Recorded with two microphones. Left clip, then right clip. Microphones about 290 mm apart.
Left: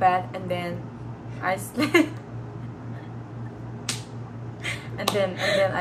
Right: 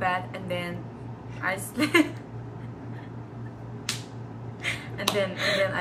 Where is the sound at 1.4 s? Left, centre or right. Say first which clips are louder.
Left 2 dB; centre.